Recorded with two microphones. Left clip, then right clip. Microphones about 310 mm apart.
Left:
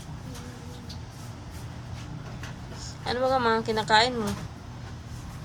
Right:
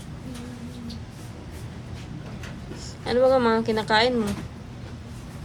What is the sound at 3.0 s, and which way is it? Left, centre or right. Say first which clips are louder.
Speech: right 5 dB; centre.